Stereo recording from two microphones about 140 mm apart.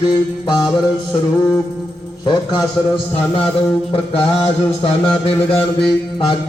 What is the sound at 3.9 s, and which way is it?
Mantra, 45° left (ahead or behind).